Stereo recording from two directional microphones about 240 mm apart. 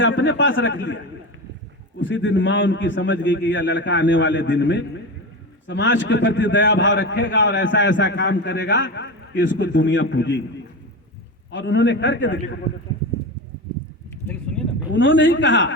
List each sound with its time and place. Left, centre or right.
0.0 s a man's voice: left
2.0 s a man's voice: left
11.5 s a man's voice: left
14.9 s a man's voice: left